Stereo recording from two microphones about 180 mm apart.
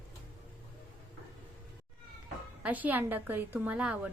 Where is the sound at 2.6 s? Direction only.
10° right (ahead or behind).